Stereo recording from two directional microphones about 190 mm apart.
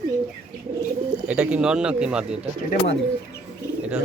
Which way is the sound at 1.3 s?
5° right (ahead or behind).